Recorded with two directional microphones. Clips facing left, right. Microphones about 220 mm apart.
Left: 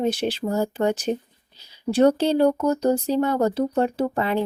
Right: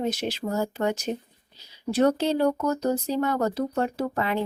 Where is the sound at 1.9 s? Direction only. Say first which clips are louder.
Left 4 dB; 30° left (ahead or behind).